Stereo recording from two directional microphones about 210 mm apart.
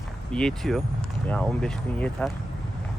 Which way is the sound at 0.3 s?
Centre (ahead or behind).